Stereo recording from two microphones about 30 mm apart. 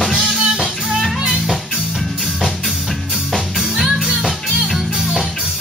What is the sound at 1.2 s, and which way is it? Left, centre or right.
Music, centre.